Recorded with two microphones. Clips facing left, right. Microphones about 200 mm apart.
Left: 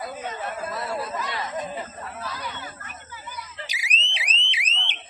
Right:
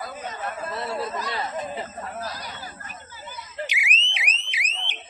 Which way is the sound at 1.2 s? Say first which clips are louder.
Right 1 dB; 30° right (ahead or behind).